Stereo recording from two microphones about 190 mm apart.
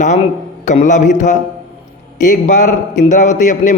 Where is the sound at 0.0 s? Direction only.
40° left (ahead or behind).